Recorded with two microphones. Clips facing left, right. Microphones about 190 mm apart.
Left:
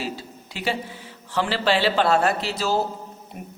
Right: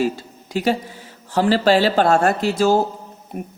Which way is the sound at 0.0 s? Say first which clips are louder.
Right 9 dB; 45° right (ahead or behind).